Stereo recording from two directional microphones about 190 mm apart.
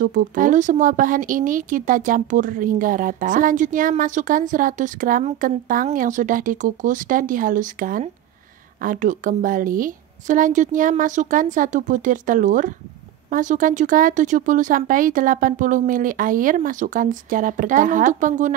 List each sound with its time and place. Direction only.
0.0 s speech: 45° right (ahead or behind)